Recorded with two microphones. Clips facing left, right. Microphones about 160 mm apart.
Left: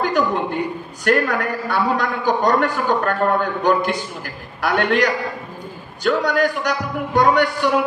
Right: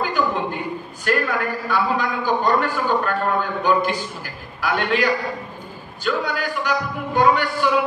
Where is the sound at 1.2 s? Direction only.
70° left (ahead or behind).